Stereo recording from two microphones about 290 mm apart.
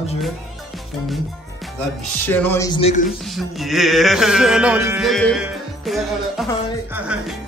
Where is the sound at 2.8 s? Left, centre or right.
Left.